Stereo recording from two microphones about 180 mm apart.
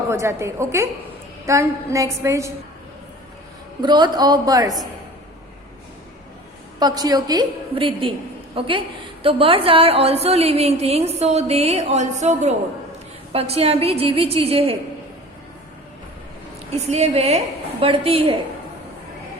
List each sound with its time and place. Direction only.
0.1 s a sound: 15° right (ahead or behind)
3.8 s a woman's voice: 25° right (ahead or behind)
6.7 s a woman's voice: 20° right (ahead or behind)
16.8 s a woman's voice: 35° right (ahead or behind)